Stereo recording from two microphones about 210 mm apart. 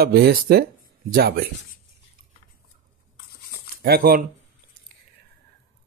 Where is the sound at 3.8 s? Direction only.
45° right (ahead or behind).